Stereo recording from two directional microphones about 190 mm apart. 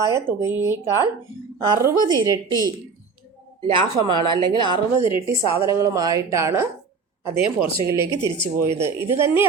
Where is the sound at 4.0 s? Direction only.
25° right (ahead or behind).